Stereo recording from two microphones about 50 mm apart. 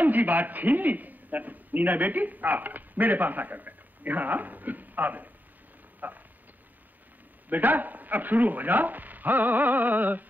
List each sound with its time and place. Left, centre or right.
0.0 s a man's voice: right
7.4 s speech: right